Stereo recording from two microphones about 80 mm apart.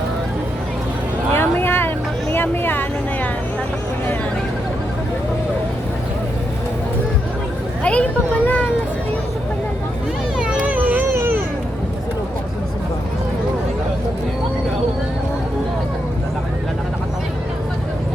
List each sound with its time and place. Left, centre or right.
1.3 s vehicle: left
2.3 s a sound: left
7.9 s children playing: centre
10.3 s cat: centre
10.8 s cat: right